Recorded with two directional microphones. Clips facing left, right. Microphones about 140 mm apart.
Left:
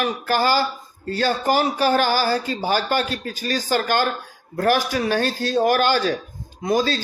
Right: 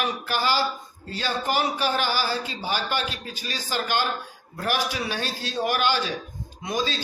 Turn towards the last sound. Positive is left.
turn(degrees=45)  # may be behind; listen again after turning